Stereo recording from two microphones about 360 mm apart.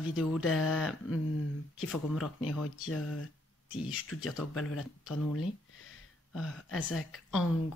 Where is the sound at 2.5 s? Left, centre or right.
Left.